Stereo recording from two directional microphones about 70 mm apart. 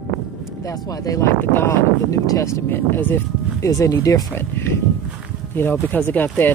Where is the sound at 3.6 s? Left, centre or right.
Left.